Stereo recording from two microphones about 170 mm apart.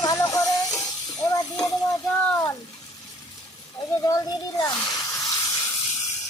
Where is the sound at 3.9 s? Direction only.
20° left (ahead or behind).